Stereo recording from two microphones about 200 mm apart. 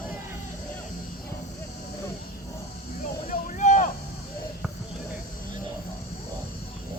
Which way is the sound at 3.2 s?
40° left (ahead or behind).